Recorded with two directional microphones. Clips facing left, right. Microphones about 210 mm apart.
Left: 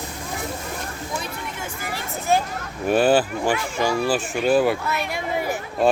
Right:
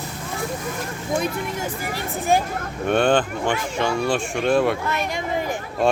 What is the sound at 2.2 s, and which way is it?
Speech, 15° right (ahead or behind).